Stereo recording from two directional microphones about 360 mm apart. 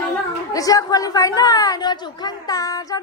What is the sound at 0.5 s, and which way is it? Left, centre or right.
A woman's voice, centre.